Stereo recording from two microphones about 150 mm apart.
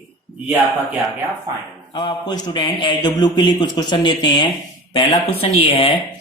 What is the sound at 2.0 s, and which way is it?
A man's voice, 30° left (ahead or behind).